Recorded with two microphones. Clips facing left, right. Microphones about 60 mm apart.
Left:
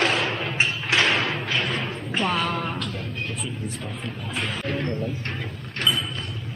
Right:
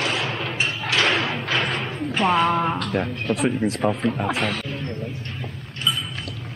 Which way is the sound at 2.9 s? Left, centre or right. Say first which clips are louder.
Right 8 dB; right.